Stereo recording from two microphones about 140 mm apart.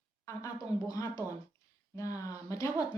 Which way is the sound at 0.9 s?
25° left (ahead or behind).